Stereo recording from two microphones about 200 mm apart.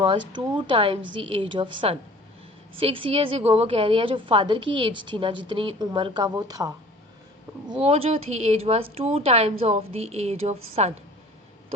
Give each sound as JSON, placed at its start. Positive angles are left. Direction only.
{"t": 0.0, "sound": "a woman's voice", "side_deg": -25}
{"t": 7.7, "sound": "speech", "side_deg": -30}